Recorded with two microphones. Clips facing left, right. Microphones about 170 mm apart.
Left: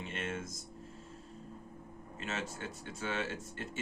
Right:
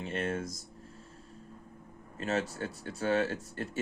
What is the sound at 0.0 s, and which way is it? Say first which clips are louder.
Speech: right 6 dB; 35° right (ahead or behind).